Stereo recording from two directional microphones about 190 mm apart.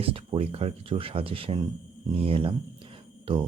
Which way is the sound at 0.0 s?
30° right (ahead or behind).